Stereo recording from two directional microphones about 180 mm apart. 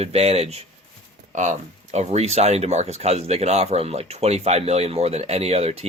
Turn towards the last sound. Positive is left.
turn(degrees=-35)  # may be behind; listen again after turning